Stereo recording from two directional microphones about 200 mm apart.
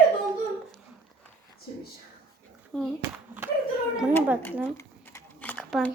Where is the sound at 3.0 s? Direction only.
10° right (ahead or behind).